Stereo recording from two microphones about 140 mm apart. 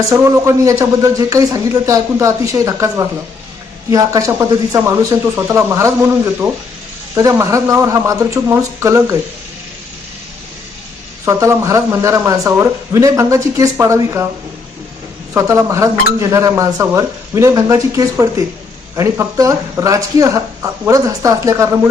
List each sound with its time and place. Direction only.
0.0 s speech: 20° right (ahead or behind)
7.2 s speech: 20° right (ahead or behind)
11.3 s speech: 20° right (ahead or behind)
15.3 s speech: 20° right (ahead or behind)